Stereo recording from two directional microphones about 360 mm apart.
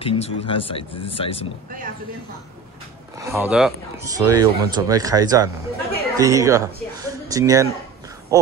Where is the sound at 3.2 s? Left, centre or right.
Centre.